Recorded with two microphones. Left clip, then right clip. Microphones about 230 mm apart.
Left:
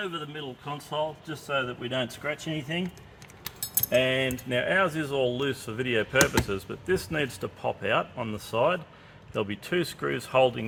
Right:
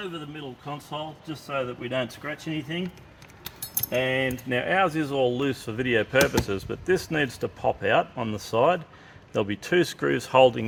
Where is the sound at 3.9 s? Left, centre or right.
Centre.